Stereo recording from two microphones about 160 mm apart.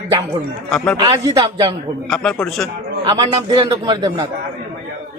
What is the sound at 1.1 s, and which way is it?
Speech, 25° right (ahead or behind).